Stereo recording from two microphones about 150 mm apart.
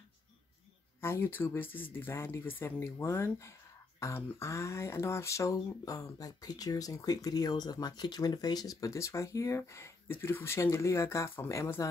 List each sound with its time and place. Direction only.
1.0 s speech: 15° left (ahead or behind)